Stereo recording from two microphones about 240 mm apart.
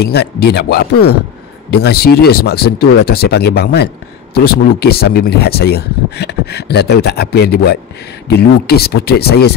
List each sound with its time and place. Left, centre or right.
0.0 s speech: left